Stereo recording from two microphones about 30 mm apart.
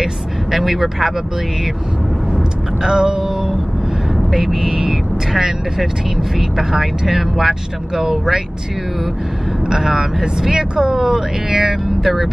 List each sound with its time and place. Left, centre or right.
0.0 s vehicle: centre
2.8 s vehicle: right
4.3 s speech: centre
9.7 s speech: centre